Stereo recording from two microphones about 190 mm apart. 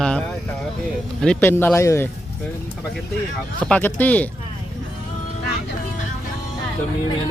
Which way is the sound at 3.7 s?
10° left (ahead or behind).